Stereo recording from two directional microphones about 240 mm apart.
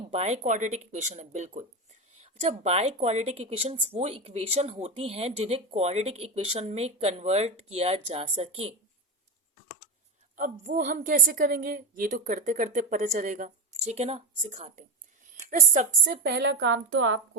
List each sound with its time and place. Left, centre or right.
0.1 s speech: right
10.3 s a woman's voice: right
15.3 s a sound: right
16.2 s a woman's voice: right